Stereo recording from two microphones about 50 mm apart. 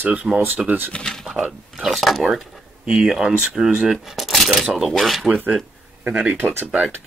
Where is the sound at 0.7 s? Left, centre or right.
Right.